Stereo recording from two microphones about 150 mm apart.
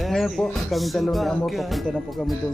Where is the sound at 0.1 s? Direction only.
Centre (ahead or behind).